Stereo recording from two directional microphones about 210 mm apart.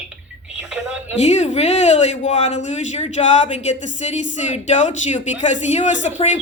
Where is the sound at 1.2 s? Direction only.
35° left (ahead or behind).